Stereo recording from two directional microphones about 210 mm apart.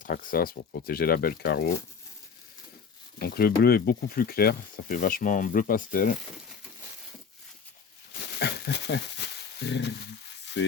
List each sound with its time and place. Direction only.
0.0 s speech: 45° left (ahead or behind)
3.2 s speech: 45° left (ahead or behind)
8.2 s a sound: 55° left (ahead or behind)